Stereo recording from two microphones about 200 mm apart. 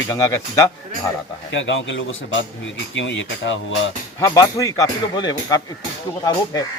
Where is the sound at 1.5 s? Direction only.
70° left (ahead or behind).